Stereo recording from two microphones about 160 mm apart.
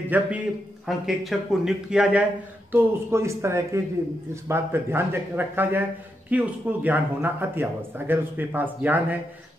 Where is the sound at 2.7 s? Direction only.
15° right (ahead or behind).